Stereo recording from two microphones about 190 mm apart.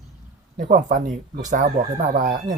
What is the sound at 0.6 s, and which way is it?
Speech, 45° right (ahead or behind).